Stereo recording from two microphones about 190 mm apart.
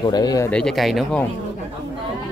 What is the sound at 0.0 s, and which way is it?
Speech, 20° left (ahead or behind).